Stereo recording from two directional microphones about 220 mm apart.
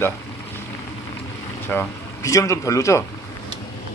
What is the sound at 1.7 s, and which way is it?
Speech, 15° left (ahead or behind).